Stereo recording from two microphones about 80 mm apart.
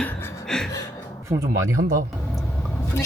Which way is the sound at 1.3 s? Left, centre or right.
Right.